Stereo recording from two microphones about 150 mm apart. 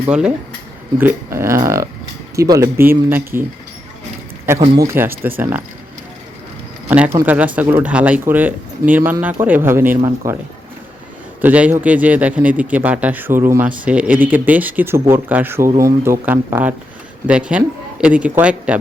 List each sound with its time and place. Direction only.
0.1 s speech: 5° right (ahead or behind)
4.8 s speech: 15° right (ahead or behind)
6.8 s speech: 10° right (ahead or behind)
11.3 s speech: 10° right (ahead or behind)